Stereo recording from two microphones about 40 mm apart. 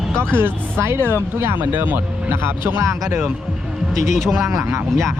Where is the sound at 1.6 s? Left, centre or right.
Right.